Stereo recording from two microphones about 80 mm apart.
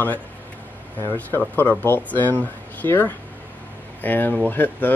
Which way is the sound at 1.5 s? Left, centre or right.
Left.